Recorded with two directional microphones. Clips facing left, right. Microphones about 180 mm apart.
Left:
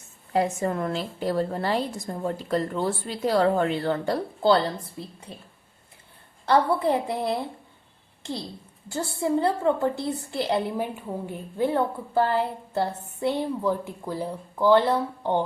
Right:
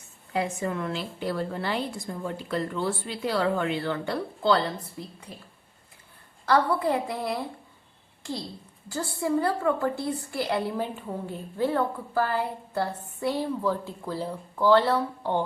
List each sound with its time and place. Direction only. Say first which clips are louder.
0.3 s a woman's voice: left 4 dB; 40° left (ahead or behind)
8.9 s a woman's voice: left 2 dB; 25° left (ahead or behind)